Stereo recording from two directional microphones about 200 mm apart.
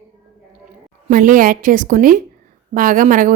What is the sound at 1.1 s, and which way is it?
Speech, 45° right (ahead or behind).